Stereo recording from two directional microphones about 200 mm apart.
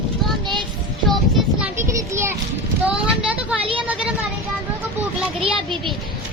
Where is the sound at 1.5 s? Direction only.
15° right (ahead or behind).